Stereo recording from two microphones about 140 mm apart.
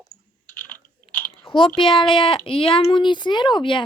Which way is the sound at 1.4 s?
35° left (ahead or behind).